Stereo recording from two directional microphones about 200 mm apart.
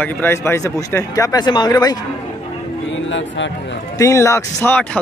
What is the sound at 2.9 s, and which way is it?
Speech, 70° left (ahead or behind).